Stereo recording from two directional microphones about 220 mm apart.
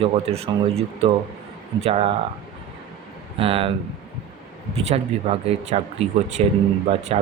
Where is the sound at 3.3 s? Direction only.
25° right (ahead or behind).